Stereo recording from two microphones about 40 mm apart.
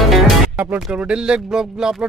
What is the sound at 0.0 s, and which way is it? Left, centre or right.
Music, centre.